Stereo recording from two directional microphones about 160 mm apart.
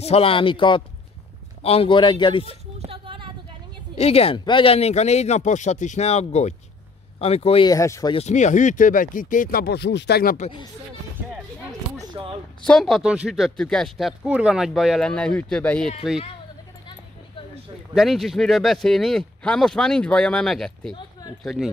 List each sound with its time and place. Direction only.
0.0 s speech: 35° left (ahead or behind)
2.8 s a sound: 35° right (ahead or behind)
3.9 s speech: 40° left (ahead or behind)
7.6 s speech: 20° left (ahead or behind)
8.1 s speech: 45° left (ahead or behind); by 10.3 s 85° left
12.2 s a sound: 35° right (ahead or behind)
12.6 s speech: 5° left (ahead or behind)
17.9 s speech: centre (ahead or behind)